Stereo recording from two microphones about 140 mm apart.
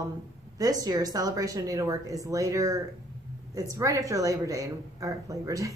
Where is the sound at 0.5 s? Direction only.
25° right (ahead or behind).